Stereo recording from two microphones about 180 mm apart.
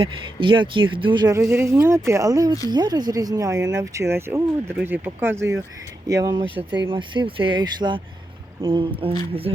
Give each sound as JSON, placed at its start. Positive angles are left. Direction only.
{"t": 0.0, "sound": "speech", "side_deg": -30}